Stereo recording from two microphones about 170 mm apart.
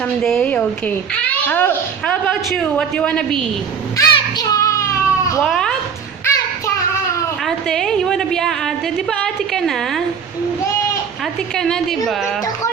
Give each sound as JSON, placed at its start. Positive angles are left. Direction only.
{"t": 0.2, "sound": "a woman's voice", "side_deg": 5}
{"t": 3.9, "sound": "baby cry", "side_deg": 20}
{"t": 5.5, "sound": "a woman's voice", "side_deg": 5}
{"t": 6.2, "sound": "child singing", "side_deg": 20}
{"t": 7.4, "sound": "a woman's voice", "side_deg": 0}
{"t": 11.5, "sound": "a woman's voice", "side_deg": 5}